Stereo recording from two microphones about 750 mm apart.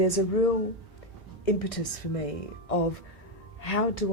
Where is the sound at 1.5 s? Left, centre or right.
Left.